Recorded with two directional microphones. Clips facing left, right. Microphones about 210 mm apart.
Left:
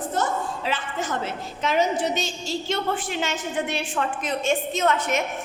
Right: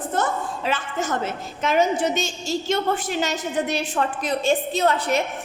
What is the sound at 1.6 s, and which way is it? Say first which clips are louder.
A woman's voice: right 2 dB; 50° right (ahead or behind).